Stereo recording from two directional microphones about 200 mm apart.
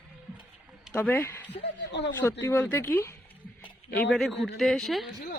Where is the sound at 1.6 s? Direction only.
60° left (ahead or behind).